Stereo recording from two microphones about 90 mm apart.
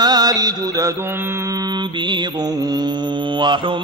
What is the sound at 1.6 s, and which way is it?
Mantra, 55° right (ahead or behind).